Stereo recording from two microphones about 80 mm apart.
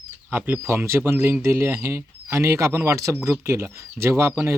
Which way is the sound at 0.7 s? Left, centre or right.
Right.